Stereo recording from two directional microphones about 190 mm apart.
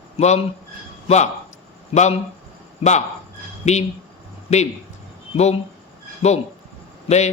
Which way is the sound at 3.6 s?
35° left (ahead or behind).